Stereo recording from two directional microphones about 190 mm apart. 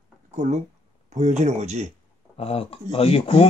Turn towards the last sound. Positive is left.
turn(degrees=30)  # may be behind; listen again after turning